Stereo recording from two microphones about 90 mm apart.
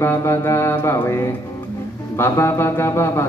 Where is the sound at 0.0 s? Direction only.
30° left (ahead or behind).